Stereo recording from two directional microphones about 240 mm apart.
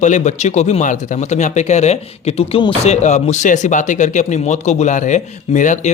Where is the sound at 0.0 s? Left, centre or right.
Left.